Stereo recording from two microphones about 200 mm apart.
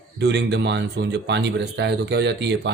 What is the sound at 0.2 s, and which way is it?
Speech, 60° right (ahead or behind).